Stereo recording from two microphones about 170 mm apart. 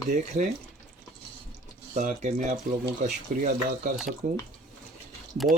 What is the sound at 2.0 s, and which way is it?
Speech, 45° right (ahead or behind).